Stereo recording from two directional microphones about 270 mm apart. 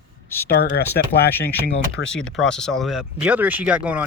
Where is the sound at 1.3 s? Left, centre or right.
Centre.